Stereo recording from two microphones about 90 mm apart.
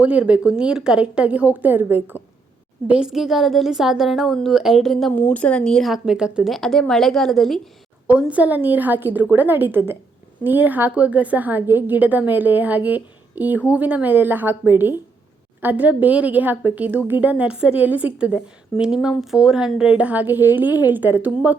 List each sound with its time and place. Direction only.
0.0 s a woman's voice: 15° right (ahead or behind)
2.8 s a woman's voice: 10° right (ahead or behind)
5.1 s speech: 20° left (ahead or behind)
5.9 s a woman's voice: 10° right (ahead or behind)
6.5 s a woman's voice: 5° left (ahead or behind)
8.0 s a woman's voice: 15° right (ahead or behind)